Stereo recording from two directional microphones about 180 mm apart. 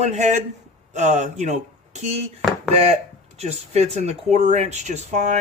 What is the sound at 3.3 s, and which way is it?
Speech, 35° right (ahead or behind).